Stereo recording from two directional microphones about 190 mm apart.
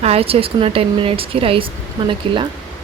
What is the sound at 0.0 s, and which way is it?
Speech, 30° right (ahead or behind).